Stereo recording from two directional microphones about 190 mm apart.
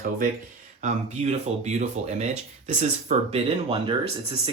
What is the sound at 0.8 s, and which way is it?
Speech, 35° right (ahead or behind).